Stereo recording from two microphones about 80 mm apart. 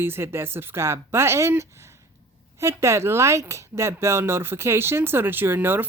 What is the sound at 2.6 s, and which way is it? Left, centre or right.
A woman's voice, right.